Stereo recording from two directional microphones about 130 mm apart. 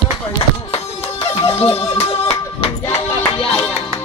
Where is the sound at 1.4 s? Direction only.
45° left (ahead or behind).